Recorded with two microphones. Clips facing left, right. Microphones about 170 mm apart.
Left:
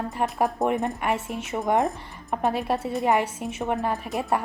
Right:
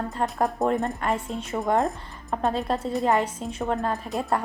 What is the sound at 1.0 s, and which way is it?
Speech, 5° left (ahead or behind).